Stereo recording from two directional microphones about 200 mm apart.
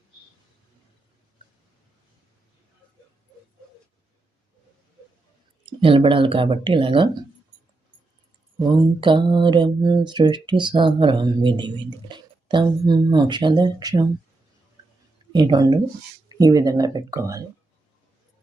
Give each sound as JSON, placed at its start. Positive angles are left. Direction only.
{"t": 5.6, "sound": "speech", "side_deg": -25}
{"t": 8.6, "sound": "speech", "side_deg": -20}
{"t": 15.3, "sound": "speech", "side_deg": -20}